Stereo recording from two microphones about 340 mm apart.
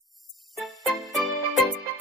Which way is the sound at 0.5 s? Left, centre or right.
Centre.